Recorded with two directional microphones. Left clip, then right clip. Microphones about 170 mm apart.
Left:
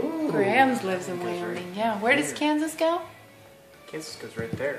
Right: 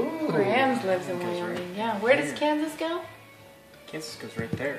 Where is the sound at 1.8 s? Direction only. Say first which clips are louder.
Even; 60° left (ahead or behind).